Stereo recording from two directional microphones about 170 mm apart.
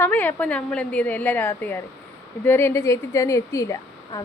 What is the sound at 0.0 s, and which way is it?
A woman's voice, 10° left (ahead or behind).